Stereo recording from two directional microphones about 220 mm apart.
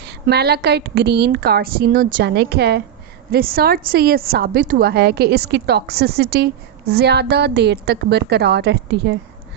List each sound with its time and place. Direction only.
0.0 s a woman's voice: 50° right (ahead or behind)